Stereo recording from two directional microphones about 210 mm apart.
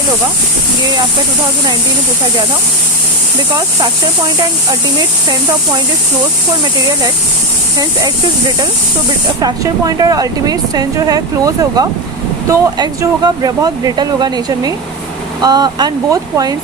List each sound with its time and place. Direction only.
7.8 s speech: 15° right (ahead or behind)